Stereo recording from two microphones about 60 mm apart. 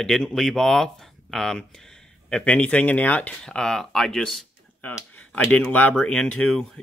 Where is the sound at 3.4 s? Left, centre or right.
Centre.